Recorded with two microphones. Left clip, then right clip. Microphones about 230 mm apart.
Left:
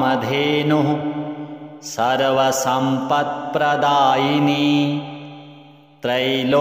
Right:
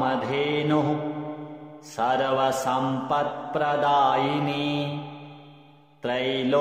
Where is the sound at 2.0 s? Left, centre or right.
Left.